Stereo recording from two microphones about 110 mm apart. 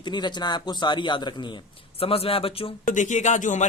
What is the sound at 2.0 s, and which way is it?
Speech, 60° left (ahead or behind).